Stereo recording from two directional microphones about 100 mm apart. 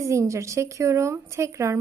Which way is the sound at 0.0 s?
30° right (ahead or behind).